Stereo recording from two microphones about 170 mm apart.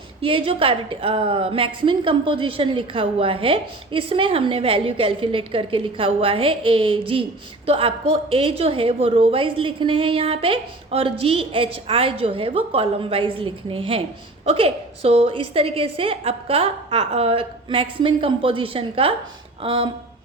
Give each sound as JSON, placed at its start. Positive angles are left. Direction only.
{"t": 0.2, "sound": "a woman's voice", "side_deg": -30}